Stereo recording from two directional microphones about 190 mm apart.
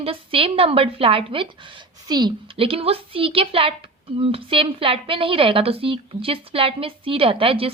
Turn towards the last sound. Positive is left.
turn(degrees=-30)  # may be behind; listen again after turning